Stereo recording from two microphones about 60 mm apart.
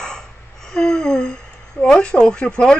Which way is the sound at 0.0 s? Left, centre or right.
Centre.